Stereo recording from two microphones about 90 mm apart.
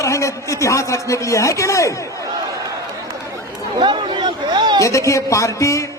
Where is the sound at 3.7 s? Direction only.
60° right (ahead or behind).